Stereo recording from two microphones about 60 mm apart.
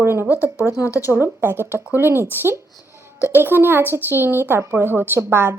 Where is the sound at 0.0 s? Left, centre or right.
Right.